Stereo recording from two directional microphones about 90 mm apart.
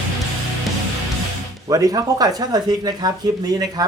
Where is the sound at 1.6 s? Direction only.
40° right (ahead or behind).